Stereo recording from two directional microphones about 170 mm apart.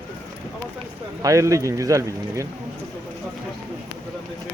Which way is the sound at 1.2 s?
20° right (ahead or behind).